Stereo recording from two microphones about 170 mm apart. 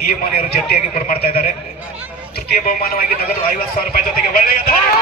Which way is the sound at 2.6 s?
60° left (ahead or behind).